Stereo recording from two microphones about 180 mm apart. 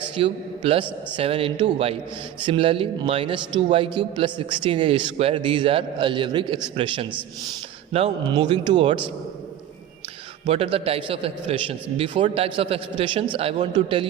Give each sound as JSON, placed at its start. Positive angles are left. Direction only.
{"t": 0.2, "sound": "a man's voice", "side_deg": -30}
{"t": 10.4, "sound": "a man's voice", "side_deg": -30}